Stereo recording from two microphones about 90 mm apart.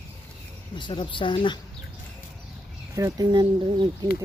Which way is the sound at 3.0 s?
40° right (ahead or behind).